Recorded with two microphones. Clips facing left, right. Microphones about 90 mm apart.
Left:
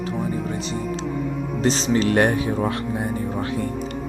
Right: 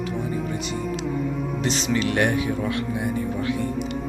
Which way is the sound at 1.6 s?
35° left (ahead or behind).